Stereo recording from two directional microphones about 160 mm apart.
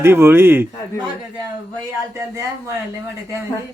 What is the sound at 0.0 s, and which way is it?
Speech, 15° right (ahead or behind).